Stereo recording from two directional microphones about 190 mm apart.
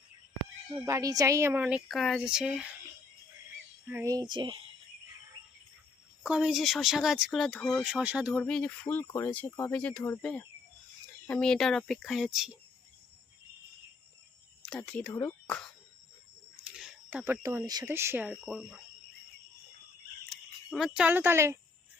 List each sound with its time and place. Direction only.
0.7 s speech: 15° right (ahead or behind)
3.8 s speech: 15° right (ahead or behind)
6.2 s speech: 5° right (ahead or behind)
14.6 s speech: 5° left (ahead or behind)
16.6 s speech: 5° right (ahead or behind)
20.3 s speech: centre (ahead or behind)